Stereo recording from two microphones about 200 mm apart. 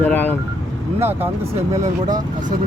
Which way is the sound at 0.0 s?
10° left (ahead or behind).